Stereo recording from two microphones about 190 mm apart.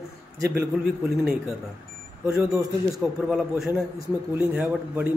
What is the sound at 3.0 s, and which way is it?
A man's voice, centre (ahead or behind).